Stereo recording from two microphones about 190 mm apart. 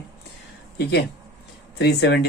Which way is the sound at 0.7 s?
60° left (ahead or behind).